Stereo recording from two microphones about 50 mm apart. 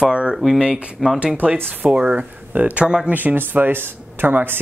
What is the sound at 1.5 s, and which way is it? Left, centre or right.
Speech, right.